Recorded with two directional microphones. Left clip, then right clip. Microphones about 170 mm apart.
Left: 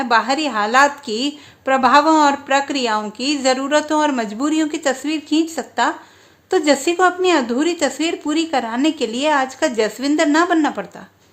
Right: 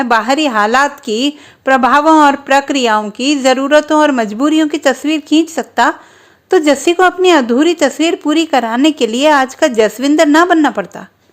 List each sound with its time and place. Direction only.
0.0 s speech: 40° right (ahead or behind)